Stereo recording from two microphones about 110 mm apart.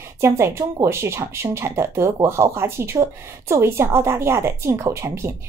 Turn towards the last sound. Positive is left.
turn(degrees=-25)  # may be behind; listen again after turning